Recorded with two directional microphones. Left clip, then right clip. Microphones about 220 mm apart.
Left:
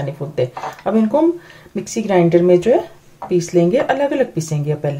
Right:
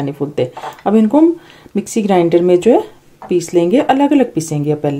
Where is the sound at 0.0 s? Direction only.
40° right (ahead or behind).